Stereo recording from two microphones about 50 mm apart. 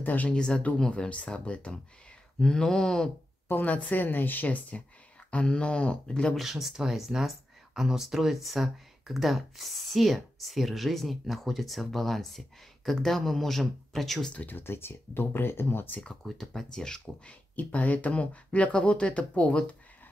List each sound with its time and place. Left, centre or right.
0.0 s speech: left
0.3 s speech: centre
3.4 s speech: left; by 6.3 s centre
6.3 s speech: centre
14.3 s speech: left
14.6 s speech: left
16.3 s speech: centre
17.0 s speech: left